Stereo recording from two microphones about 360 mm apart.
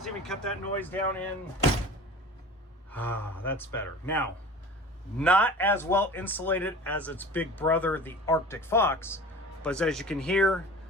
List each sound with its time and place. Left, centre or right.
0.0 s speech: centre
2.9 s speech: centre